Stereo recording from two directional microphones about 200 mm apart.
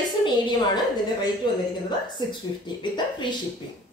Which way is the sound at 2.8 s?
25° left (ahead or behind).